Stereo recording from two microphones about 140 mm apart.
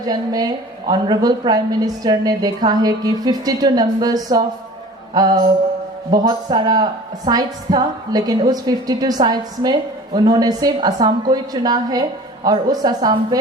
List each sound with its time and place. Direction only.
0.0 s a woman's voice: 30° right (ahead or behind)